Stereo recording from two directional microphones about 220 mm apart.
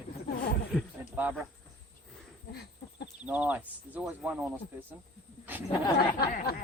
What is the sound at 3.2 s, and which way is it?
Speech, 5° right (ahead or behind).